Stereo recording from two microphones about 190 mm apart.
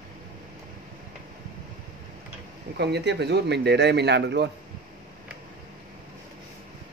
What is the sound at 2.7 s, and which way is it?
Speech, 60° right (ahead or behind).